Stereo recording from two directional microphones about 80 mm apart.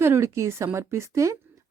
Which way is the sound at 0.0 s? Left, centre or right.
Right.